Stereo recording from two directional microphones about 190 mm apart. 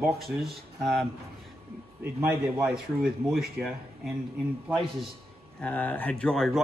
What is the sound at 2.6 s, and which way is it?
Speech, centre (ahead or behind).